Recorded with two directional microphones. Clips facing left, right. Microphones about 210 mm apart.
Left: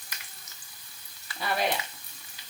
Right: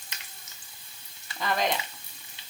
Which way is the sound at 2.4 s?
25° right (ahead or behind).